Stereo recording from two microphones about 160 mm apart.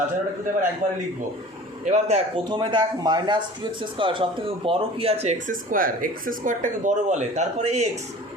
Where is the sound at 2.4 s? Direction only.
30° right (ahead or behind).